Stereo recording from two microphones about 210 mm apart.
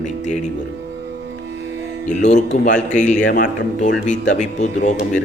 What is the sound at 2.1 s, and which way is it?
A man's voice, 35° left (ahead or behind).